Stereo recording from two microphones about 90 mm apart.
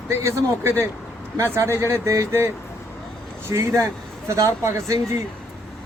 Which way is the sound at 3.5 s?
30° right (ahead or behind).